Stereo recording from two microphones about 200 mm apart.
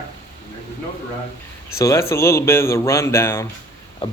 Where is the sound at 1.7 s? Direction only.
15° left (ahead or behind).